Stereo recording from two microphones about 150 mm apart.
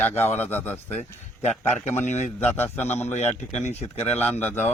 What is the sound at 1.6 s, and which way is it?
Speech, 50° left (ahead or behind).